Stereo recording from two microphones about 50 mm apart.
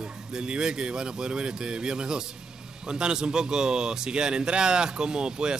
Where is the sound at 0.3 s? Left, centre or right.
Centre.